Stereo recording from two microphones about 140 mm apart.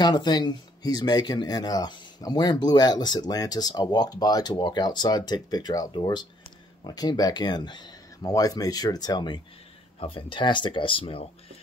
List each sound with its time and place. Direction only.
0.0 s speech: 30° left (ahead or behind)